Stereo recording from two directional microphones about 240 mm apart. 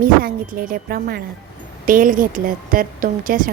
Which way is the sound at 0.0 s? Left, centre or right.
Right.